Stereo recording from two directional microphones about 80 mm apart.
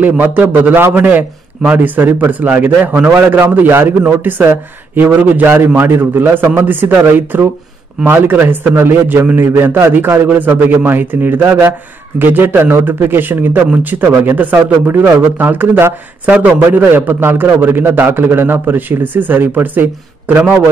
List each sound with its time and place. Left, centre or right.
0.0 s speech: right